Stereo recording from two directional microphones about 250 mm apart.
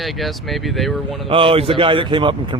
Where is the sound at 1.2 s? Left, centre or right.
Right.